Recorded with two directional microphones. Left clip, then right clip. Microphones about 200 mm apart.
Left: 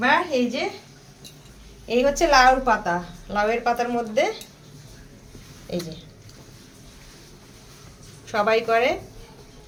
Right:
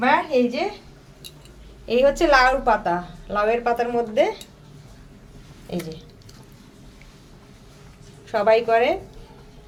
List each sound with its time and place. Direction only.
0.0 s a sound: 15° right (ahead or behind)
1.9 s a woman's voice: 35° right (ahead or behind)
5.7 s a woman's voice: 25° right (ahead or behind)
8.3 s a woman's voice: 25° right (ahead or behind)